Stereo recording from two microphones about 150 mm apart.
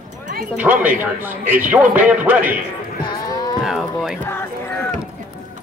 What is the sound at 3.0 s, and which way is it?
Livestock, 30° left (ahead or behind).